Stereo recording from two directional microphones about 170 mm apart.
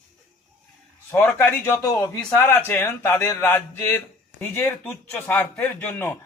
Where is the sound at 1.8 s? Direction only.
20° left (ahead or behind).